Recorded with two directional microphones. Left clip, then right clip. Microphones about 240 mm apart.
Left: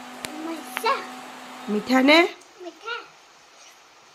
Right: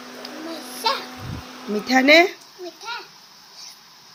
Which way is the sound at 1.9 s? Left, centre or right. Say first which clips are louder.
Right 3 dB; centre.